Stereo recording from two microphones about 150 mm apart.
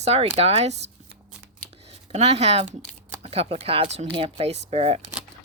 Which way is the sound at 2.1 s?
45° right (ahead or behind).